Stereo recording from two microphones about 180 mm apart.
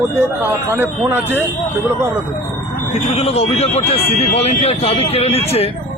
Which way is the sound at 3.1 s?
35° left (ahead or behind).